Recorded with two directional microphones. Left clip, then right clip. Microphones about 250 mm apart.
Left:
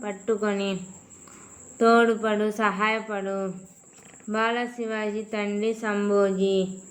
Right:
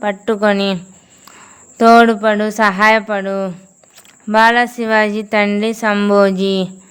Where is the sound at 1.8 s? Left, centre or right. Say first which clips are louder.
Right 11 dB; right.